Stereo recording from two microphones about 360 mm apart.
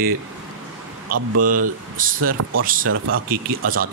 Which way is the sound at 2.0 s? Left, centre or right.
Right.